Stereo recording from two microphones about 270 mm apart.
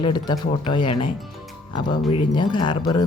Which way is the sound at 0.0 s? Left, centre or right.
Centre.